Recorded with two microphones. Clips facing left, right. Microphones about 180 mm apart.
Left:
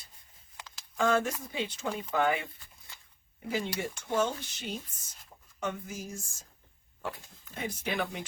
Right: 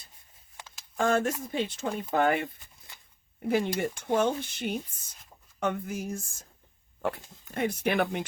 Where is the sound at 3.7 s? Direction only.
55° right (ahead or behind).